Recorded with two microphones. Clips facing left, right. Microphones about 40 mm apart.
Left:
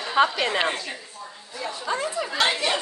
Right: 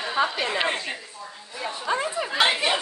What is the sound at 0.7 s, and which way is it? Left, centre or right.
Speech, right.